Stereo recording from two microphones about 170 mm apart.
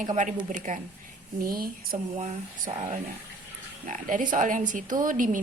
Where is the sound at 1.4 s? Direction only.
60° right (ahead or behind).